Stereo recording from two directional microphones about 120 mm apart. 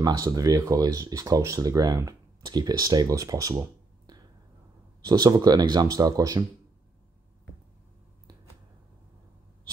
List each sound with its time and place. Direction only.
0.0 s speech: 30° right (ahead or behind)
5.0 s speech: 35° right (ahead or behind)